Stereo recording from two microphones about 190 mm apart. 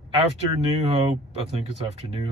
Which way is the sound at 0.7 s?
30° right (ahead or behind).